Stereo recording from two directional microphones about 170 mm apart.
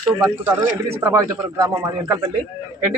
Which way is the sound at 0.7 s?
65° right (ahead or behind).